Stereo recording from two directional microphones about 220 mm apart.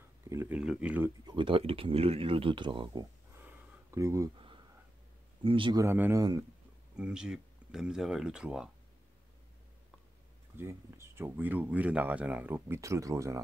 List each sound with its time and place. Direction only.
0.3 s speech: 10° right (ahead or behind)
1.2 s speech: 20° right (ahead or behind)
7.0 s speech: 5° right (ahead or behind)
10.6 s speech: 10° right (ahead or behind)